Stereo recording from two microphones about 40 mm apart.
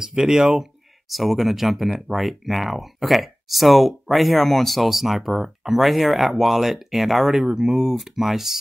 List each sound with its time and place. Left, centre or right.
0.0 s speech: centre
1.0 s speech: centre
7.4 s speech: centre
7.9 s speech: centre